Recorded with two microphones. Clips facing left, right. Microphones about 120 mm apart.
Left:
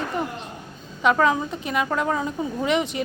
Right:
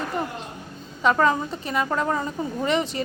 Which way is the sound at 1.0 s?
Centre (ahead or behind).